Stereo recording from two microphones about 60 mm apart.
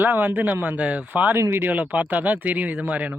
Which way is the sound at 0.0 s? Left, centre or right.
Right.